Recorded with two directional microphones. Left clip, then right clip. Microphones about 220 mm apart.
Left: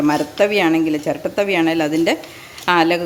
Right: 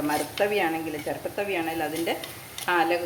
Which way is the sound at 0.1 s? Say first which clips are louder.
Left 5 dB; 50° left (ahead or behind).